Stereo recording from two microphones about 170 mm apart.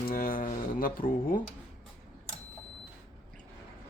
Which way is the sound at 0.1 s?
55° left (ahead or behind).